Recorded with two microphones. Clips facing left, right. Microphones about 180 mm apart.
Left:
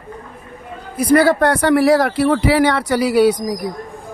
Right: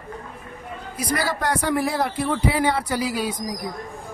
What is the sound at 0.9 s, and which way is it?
Speech, 55° left (ahead or behind).